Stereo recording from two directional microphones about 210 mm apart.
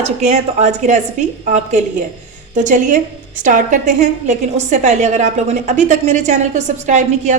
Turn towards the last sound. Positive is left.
turn(degrees=-35)  # may be behind; listen again after turning